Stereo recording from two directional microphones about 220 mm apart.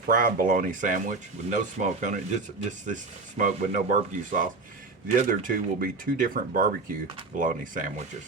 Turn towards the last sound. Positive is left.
turn(degrees=-35)  # may be behind; listen again after turning